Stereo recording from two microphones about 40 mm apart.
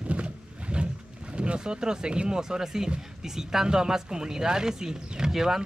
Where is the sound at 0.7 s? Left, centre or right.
Right.